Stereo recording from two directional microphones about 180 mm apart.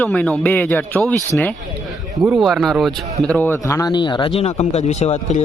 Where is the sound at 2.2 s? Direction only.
Centre (ahead or behind).